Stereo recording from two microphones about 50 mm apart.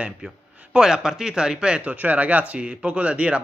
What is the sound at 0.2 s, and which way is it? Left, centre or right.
Speech, right.